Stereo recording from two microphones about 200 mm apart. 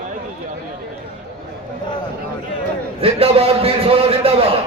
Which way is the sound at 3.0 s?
30° right (ahead or behind).